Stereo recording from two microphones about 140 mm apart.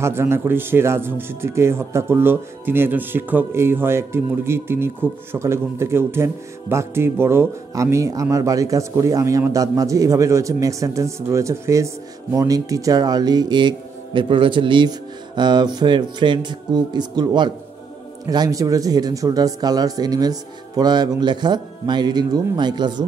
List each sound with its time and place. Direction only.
0.0 s speech: 20° right (ahead or behind)